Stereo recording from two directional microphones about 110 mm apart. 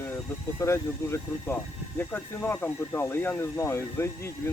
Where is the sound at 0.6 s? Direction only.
25° left (ahead or behind).